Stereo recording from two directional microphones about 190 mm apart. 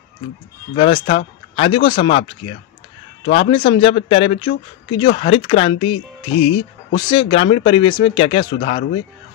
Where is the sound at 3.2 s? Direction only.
25° left (ahead or behind).